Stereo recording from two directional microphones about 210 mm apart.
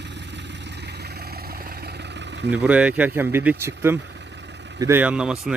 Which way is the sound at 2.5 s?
5° right (ahead or behind).